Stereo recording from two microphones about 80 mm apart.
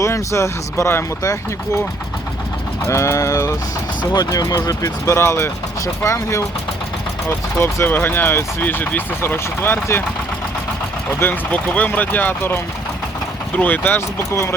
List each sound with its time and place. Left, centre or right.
0.0 s speech: left
2.8 s speech: left
4.1 s speech: left
5.1 s speech: left
11.2 s speech: left